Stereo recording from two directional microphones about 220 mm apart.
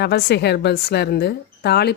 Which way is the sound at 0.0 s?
50° left (ahead or behind).